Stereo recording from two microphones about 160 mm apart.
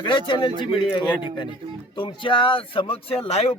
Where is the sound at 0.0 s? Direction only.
30° left (ahead or behind).